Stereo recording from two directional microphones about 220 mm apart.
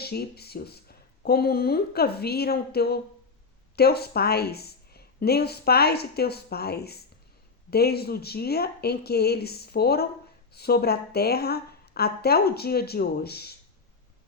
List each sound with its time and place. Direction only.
0.0 s a woman's voice: 45° left (ahead or behind)